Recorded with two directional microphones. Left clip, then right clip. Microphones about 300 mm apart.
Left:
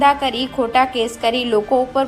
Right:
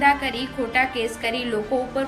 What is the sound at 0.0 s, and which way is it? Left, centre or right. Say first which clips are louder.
A woman's voice: left 5 dB; centre.